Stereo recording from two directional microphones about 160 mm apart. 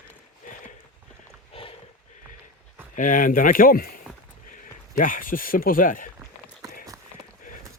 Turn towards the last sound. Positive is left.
turn(degrees=60)  # may be behind; listen again after turning